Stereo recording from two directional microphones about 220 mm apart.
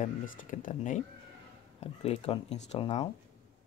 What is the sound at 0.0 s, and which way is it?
Speech, 40° left (ahead or behind).